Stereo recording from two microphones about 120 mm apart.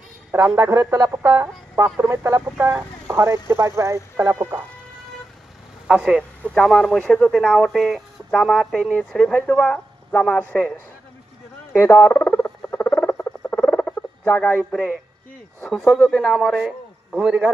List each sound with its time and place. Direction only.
0.3 s speech: 20° right (ahead or behind)
5.9 s speech: 5° right (ahead or behind)
11.8 s rodents: 20° left (ahead or behind); by 15.0 s 5° left (ahead or behind)
15.9 s speech: 5° left (ahead or behind)